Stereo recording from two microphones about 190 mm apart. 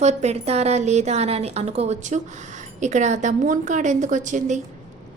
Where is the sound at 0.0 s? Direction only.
35° right (ahead or behind).